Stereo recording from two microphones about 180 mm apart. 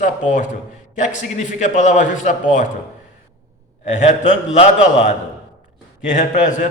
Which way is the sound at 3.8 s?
40° left (ahead or behind).